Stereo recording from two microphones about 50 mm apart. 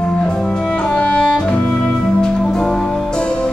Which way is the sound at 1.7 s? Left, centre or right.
Centre.